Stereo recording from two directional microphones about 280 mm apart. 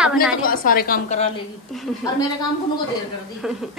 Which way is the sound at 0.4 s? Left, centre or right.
Left.